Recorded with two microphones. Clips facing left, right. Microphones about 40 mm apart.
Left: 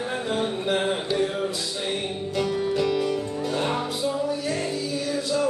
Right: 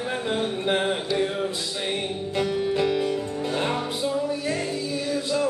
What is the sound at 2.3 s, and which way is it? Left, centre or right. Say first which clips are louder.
Music: even; right.